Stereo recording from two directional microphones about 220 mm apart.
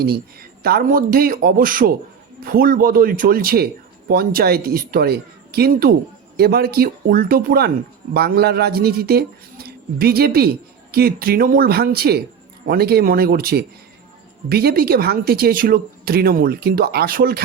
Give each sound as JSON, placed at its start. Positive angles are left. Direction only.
{"t": 0.6, "sound": "speech", "side_deg": -45}